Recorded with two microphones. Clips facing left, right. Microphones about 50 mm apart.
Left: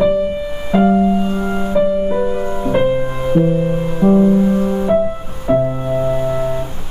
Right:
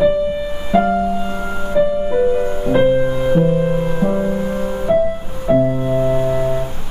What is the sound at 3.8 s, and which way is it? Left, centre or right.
Music, centre.